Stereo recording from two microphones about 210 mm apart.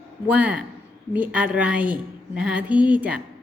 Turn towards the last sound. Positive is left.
turn(degrees=-5)  # may be behind; listen again after turning